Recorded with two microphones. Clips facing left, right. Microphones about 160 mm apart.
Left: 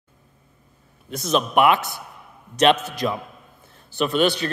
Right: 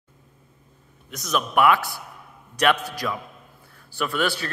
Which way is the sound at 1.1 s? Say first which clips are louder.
Left 3 dB; 25° left (ahead or behind).